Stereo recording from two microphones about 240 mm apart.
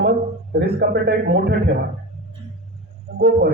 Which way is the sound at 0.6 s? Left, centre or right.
Right.